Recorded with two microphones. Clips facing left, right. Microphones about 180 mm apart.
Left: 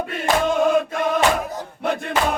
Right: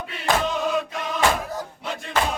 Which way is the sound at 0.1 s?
50° left (ahead or behind).